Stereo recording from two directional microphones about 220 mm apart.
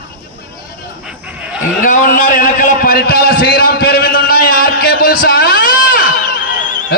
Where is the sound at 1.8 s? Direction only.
35° left (ahead or behind).